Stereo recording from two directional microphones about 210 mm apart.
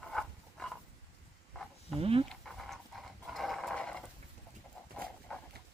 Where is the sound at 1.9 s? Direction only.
25° right (ahead or behind).